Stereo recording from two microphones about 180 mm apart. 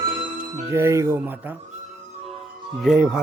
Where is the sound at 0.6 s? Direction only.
15° right (ahead or behind).